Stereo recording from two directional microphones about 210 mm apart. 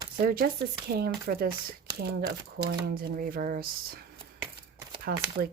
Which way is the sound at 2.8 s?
45° right (ahead or behind).